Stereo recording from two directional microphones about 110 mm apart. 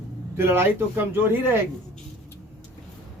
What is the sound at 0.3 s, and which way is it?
A man's voice, 20° right (ahead or behind).